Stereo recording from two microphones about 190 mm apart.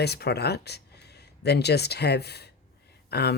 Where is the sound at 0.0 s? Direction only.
60° left (ahead or behind).